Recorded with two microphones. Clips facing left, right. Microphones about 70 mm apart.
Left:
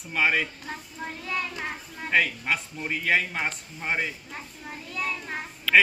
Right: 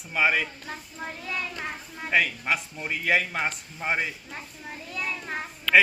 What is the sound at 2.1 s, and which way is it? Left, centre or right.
Speech, centre.